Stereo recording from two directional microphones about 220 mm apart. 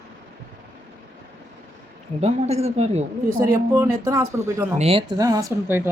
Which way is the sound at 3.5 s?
10° right (ahead or behind).